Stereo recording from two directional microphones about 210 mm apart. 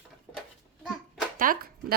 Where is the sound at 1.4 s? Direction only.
45° right (ahead or behind).